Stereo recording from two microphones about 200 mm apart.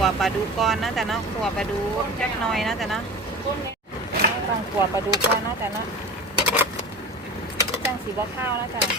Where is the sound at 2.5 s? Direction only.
Centre (ahead or behind).